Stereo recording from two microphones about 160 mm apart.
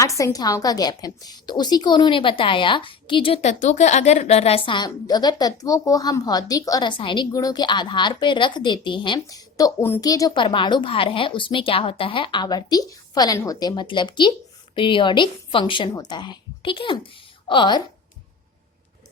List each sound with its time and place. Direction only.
0.0 s a woman's voice: 20° left (ahead or behind)